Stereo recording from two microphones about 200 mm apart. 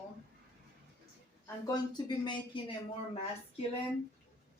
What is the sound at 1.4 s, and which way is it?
Speech, 20° left (ahead or behind).